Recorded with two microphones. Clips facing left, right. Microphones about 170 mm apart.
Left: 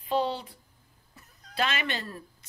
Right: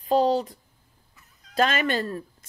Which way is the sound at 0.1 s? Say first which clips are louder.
Right 7 dB; 40° right (ahead or behind).